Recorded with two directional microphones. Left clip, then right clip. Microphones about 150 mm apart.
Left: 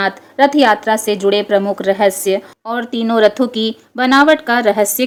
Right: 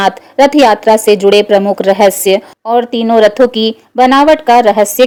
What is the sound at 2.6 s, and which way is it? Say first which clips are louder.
Speech: right 9 dB; 30° right (ahead or behind).